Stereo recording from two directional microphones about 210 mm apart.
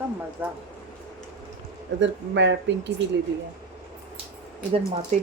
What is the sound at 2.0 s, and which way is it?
Speech, 55° right (ahead or behind).